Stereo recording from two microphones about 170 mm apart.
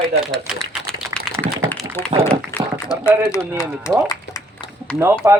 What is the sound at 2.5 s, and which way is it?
Speech, 20° left (ahead or behind).